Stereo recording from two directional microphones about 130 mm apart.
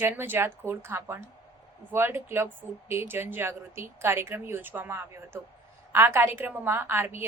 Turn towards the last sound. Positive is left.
turn(degrees=-15)  # may be behind; listen again after turning